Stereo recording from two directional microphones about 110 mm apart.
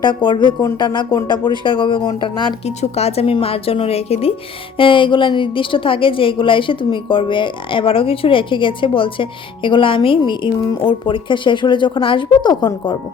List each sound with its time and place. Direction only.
0.0 s a woman's voice: 45° left (ahead or behind)
2.6 s a woman's voice: 75° left (ahead or behind)
4.8 s a woman's voice: 50° left (ahead or behind)